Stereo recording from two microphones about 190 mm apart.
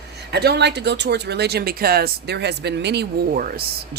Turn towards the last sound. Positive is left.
turn(degrees=-50)  # may be behind; listen again after turning